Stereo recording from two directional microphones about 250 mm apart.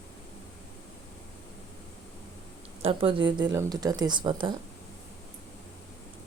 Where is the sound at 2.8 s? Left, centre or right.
Right.